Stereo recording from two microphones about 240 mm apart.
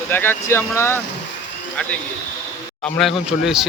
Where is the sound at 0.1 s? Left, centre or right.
Centre.